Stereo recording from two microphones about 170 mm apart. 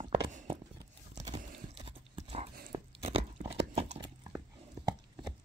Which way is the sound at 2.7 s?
35° right (ahead or behind).